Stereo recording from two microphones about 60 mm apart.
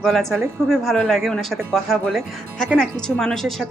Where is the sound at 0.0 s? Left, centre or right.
Centre.